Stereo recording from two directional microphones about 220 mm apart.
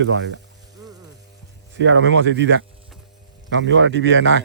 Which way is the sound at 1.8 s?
55° right (ahead or behind).